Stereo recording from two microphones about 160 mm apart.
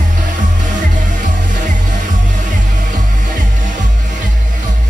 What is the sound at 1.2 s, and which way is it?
Music, 50° right (ahead or behind).